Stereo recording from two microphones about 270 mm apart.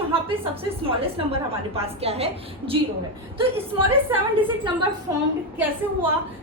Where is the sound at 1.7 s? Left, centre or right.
Right.